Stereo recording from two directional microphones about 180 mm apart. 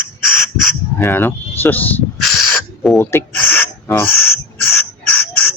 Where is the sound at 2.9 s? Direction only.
10° left (ahead or behind).